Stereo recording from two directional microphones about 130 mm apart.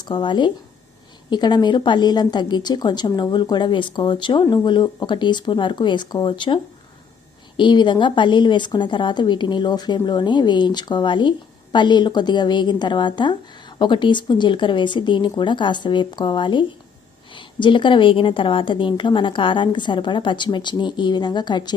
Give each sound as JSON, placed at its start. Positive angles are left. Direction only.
{"t": 0.0, "sound": "a woman's voice", "side_deg": 35}